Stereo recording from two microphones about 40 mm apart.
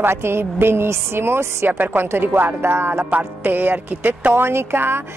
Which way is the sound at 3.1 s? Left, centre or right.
Right.